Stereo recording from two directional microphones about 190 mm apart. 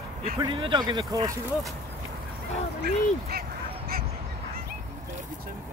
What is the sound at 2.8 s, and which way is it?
Speech, 55° right (ahead or behind).